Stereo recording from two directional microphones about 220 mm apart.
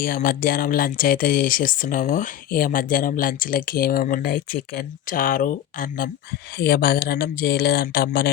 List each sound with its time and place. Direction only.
0.0 s speech: 40° left (ahead or behind)